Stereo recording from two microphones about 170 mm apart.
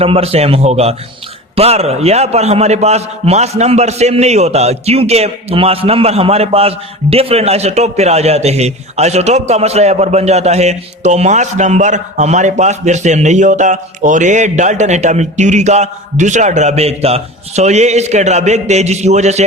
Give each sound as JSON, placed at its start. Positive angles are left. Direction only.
{"t": 0.0, "sound": "a man's voice", "side_deg": -35}